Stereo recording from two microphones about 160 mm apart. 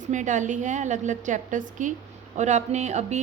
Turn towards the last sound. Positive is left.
turn(degrees=-45)  # may be behind; listen again after turning